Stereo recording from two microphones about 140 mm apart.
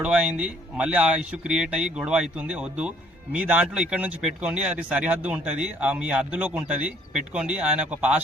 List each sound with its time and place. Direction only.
0.0 s speech: 5° right (ahead or behind)